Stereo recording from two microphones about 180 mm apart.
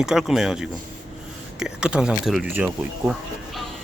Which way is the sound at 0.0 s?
Centre (ahead or behind).